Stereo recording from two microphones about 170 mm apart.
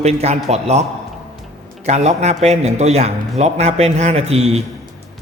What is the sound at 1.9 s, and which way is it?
A man's voice, 40° right (ahead or behind).